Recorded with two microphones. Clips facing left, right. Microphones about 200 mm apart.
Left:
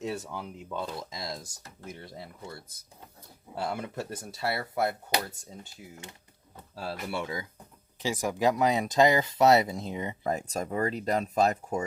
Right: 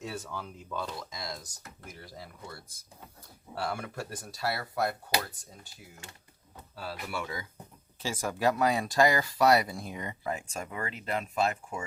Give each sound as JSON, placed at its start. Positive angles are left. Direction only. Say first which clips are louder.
{"t": 0.0, "sound": "speech", "louder": "left 4 dB", "side_deg": 20}
{"t": 7.1, "sound": "speech", "louder": "left 3 dB", "side_deg": 20}
{"t": 10.2, "sound": "speech", "louder": "left 5 dB", "side_deg": 40}